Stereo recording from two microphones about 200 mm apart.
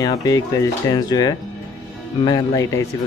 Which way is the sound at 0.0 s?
20° left (ahead or behind).